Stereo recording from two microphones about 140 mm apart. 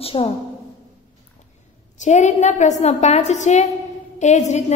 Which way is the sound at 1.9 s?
60° left (ahead or behind).